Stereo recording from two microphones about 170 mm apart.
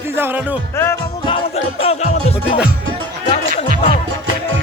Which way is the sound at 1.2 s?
35° left (ahead or behind).